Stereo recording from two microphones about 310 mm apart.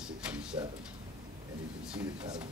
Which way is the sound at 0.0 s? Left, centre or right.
Centre.